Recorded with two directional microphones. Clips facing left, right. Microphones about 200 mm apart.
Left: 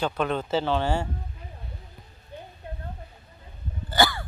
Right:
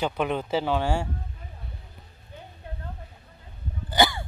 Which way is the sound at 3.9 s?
20° right (ahead or behind).